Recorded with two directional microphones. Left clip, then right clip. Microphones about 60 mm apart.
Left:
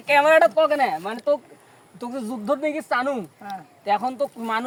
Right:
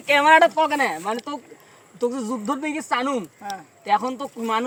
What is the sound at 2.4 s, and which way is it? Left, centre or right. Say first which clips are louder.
Speech: left 7 dB; left.